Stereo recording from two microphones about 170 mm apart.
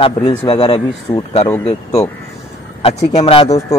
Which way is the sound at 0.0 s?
35° left (ahead or behind).